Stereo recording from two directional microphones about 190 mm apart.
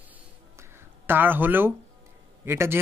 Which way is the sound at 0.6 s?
10° right (ahead or behind).